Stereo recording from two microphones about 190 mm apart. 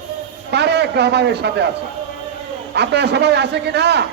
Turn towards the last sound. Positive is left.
turn(degrees=-60)  # may be behind; listen again after turning